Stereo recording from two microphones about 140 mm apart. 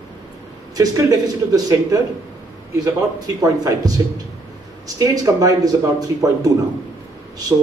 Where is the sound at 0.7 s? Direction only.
25° right (ahead or behind).